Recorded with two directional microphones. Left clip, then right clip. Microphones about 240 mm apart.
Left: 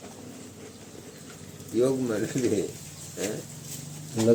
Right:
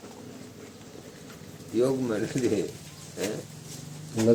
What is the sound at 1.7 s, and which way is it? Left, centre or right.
Speech, centre.